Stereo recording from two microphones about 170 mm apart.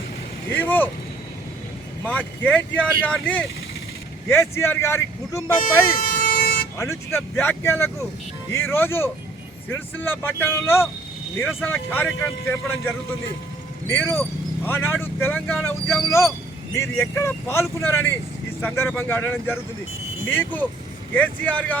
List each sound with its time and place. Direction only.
0.5 s speech: 10° left (ahead or behind)
2.0 s speech: 10° left (ahead or behind)
6.0 s vehicle: 60° left (ahead or behind)
6.7 s speech: 15° left (ahead or behind)
16.7 s speech: 15° left (ahead or behind)